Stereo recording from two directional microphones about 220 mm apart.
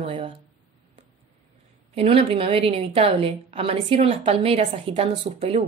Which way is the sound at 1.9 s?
25° right (ahead or behind).